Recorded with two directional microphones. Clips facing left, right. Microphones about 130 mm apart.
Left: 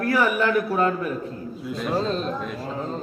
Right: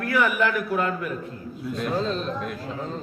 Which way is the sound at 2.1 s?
40° left (ahead or behind).